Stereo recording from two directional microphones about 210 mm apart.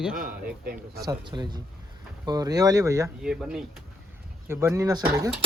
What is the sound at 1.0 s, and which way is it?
Speech, 20° right (ahead or behind).